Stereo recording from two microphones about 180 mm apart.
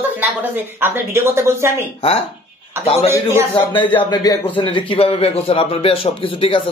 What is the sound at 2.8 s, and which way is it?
Speech, 15° right (ahead or behind).